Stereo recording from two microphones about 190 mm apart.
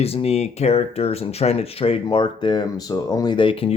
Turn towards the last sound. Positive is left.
turn(degrees=30)  # may be behind; listen again after turning